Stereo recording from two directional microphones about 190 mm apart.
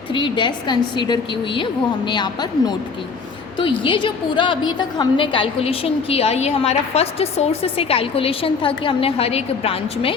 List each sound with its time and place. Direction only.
0.1 s a woman's voice: 25° left (ahead or behind)